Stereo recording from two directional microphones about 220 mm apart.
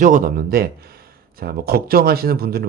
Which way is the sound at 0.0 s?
40° right (ahead or behind).